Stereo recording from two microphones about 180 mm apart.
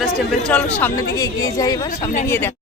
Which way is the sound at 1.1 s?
20° left (ahead or behind).